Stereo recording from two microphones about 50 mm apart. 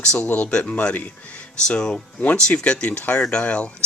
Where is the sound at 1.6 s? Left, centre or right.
Centre.